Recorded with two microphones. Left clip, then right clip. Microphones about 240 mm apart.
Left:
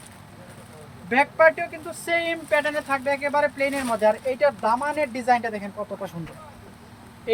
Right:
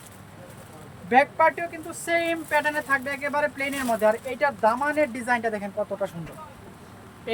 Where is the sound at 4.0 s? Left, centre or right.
Right.